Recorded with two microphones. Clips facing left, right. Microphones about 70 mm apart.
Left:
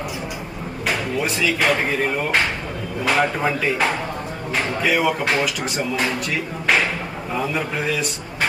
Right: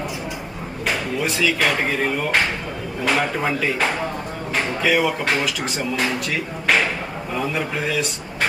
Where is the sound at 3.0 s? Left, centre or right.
Centre.